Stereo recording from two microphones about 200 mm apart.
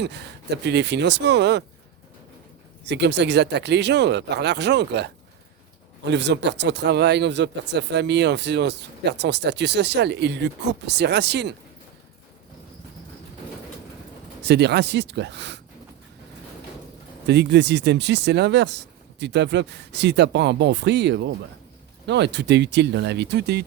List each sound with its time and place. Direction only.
0.0 s speech: 60° right (ahead or behind)
2.8 s speech: 60° right (ahead or behind)
14.4 s speech: 55° right (ahead or behind)
17.2 s speech: 55° right (ahead or behind)